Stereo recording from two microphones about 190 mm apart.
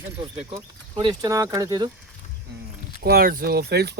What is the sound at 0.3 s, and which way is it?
Speech, 25° right (ahead or behind).